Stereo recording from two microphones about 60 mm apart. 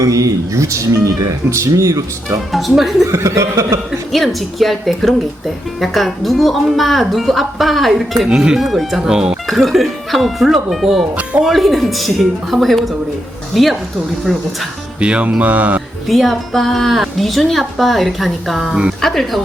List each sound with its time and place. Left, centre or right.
0.0 s speech: right
1.5 s speech: right
2.5 s a woman's voice: centre
3.1 s speech: right
4.1 s a woman's voice: centre
8.3 s speech: centre
8.5 s a woman's voice: centre
11.2 s mantra: right
11.4 s a woman's voice: centre
15.0 s mantra: centre
16.0 s a woman's voice: centre